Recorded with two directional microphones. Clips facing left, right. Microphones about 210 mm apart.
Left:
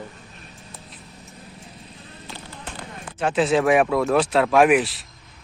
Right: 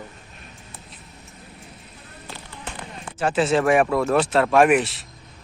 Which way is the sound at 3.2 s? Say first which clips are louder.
Even; centre (ahead or behind).